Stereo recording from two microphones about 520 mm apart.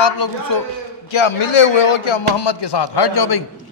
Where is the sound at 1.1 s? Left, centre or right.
Left.